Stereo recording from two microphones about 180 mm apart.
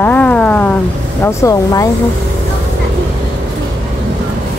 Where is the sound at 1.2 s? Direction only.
20° left (ahead or behind).